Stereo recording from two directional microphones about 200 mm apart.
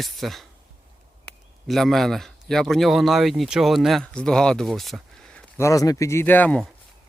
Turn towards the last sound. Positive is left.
turn(degrees=5)  # may be behind; listen again after turning